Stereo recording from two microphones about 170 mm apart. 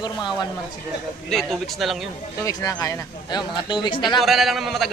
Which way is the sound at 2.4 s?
20° left (ahead or behind).